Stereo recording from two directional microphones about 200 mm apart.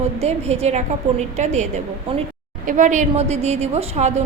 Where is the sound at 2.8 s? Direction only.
40° right (ahead or behind).